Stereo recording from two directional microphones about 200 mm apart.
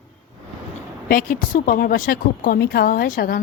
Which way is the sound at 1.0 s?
45° left (ahead or behind).